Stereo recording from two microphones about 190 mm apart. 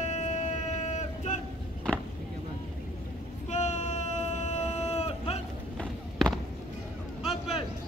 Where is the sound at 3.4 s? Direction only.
35° left (ahead or behind).